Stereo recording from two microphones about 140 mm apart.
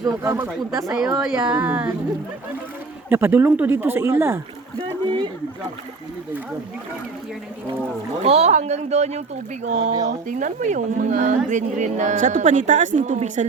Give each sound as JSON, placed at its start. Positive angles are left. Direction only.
{"t": 0.0, "sound": "speech", "side_deg": -20}
{"t": 0.9, "sound": "a woman's voice", "side_deg": -5}
{"t": 3.1, "sound": "speech", "side_deg": -20}
{"t": 4.8, "sound": "speech", "side_deg": -35}
{"t": 8.2, "sound": "speech", "side_deg": -50}